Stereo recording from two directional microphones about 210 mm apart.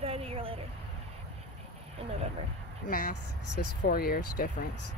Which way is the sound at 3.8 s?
45° left (ahead or behind).